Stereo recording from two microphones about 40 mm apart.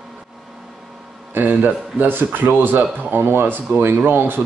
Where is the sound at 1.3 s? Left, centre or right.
Right.